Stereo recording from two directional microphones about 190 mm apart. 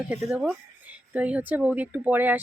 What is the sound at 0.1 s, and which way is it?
Speech, 5° right (ahead or behind).